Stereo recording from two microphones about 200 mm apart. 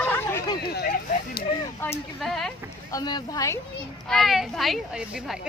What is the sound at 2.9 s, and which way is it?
Speech, 20° left (ahead or behind).